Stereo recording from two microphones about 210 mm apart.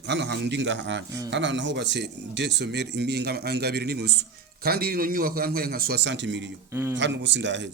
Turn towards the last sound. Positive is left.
turn(degrees=-60)  # may be behind; listen again after turning